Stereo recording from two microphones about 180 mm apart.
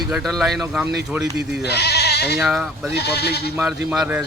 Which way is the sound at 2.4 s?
Centre (ahead or behind).